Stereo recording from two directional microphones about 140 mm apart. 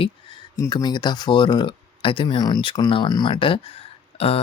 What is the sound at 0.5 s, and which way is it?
Speech, 25° left (ahead or behind).